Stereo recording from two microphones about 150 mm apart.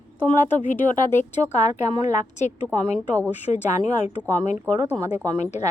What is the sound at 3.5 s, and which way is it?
Speech, 20° right (ahead or behind).